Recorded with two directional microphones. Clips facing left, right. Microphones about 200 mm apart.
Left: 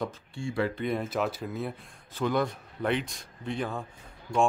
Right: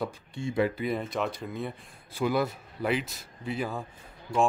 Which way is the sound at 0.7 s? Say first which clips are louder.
Left 1 dB; centre (ahead or behind).